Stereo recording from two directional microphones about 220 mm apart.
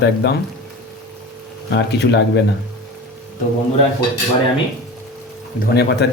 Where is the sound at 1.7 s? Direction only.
50° left (ahead or behind).